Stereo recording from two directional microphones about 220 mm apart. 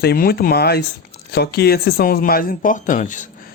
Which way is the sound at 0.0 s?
45° left (ahead or behind).